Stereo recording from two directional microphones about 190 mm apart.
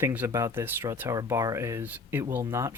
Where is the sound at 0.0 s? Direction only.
10° right (ahead or behind).